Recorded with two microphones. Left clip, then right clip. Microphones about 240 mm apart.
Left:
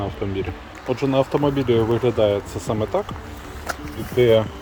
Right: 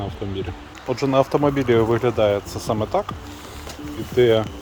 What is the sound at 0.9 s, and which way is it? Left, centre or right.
Speech, right.